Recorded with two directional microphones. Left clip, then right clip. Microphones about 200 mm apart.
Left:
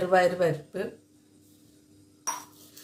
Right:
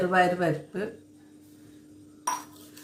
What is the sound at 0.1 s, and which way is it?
Speech, 40° left (ahead or behind).